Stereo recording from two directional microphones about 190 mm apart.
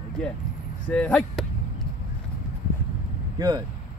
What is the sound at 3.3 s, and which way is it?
Speech, 20° right (ahead or behind).